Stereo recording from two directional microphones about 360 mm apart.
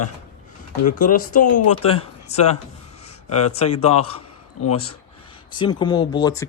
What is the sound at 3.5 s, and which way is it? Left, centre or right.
Speech, centre.